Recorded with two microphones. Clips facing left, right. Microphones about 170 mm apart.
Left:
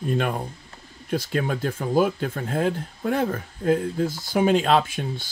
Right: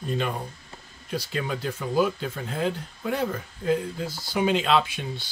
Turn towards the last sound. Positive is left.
turn(degrees=45)  # may be behind; listen again after turning